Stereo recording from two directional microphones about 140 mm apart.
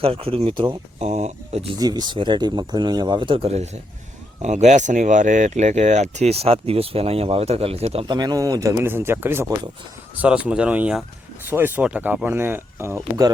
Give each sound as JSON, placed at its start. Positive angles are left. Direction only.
{"t": 0.0, "sound": "speech", "side_deg": -40}
{"t": 0.9, "sound": "speech", "side_deg": -50}
{"t": 1.8, "sound": "speech", "side_deg": -30}
{"t": 8.0, "sound": "speech", "side_deg": -30}